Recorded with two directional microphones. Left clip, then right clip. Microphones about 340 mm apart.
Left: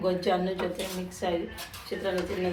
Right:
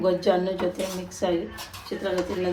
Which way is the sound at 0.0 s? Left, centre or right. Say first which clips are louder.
Right 5 dB; right.